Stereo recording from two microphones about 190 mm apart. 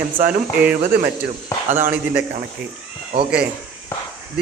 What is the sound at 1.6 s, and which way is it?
Speech, 40° right (ahead or behind).